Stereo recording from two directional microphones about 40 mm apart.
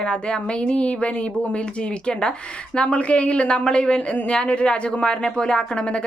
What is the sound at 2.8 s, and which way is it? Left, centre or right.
Speech, left.